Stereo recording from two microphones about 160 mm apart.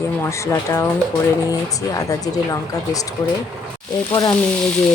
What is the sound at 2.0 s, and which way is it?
A woman's voice, 20° left (ahead or behind).